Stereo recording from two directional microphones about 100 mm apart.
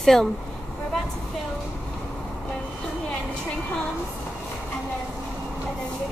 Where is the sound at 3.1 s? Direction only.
10° left (ahead or behind).